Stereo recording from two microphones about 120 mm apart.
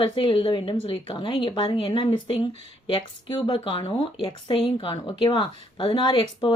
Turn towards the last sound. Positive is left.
turn(degrees=45)  # may be behind; listen again after turning